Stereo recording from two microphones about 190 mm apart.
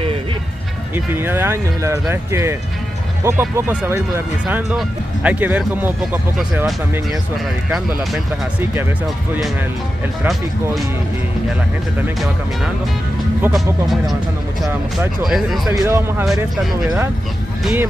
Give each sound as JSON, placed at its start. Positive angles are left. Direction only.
{"t": 0.9, "sound": "speech", "side_deg": -10}
{"t": 7.7, "sound": "speech", "side_deg": -5}
{"t": 13.4, "sound": "speech", "side_deg": 0}
{"t": 15.2, "sound": "speech", "side_deg": 0}
{"t": 15.7, "sound": "speech", "side_deg": -15}